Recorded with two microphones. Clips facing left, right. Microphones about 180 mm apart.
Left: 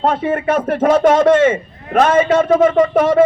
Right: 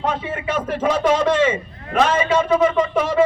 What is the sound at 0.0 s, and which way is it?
Speech, 50° left (ahead or behind).